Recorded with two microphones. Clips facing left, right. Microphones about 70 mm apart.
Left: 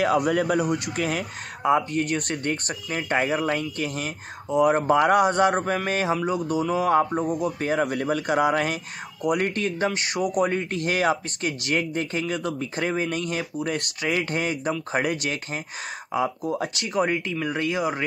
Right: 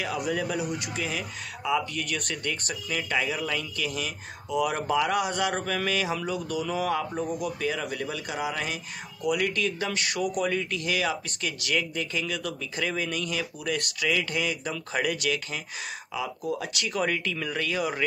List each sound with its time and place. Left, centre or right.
0.0 s speech: left
6.8 s speech: left
7.8 s speech: left
17.1 s speech: left